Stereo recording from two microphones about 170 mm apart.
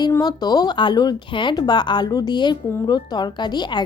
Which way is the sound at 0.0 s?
25° left (ahead or behind).